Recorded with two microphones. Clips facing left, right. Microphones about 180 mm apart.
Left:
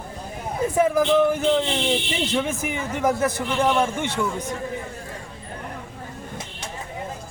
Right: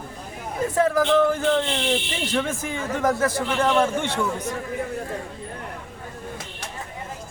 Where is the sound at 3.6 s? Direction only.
10° left (ahead or behind).